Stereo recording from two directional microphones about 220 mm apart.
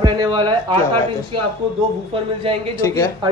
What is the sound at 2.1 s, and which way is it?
Speech, 25° right (ahead or behind).